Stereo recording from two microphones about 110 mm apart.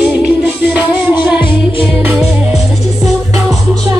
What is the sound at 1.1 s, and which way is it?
A man's voice, 15° right (ahead or behind).